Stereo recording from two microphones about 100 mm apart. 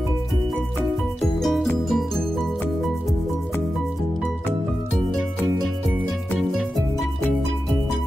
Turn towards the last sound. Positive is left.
turn(degrees=0)  # may be behind; listen again after turning